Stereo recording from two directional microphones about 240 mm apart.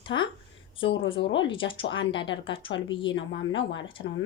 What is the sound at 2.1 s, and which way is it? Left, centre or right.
Speech, left.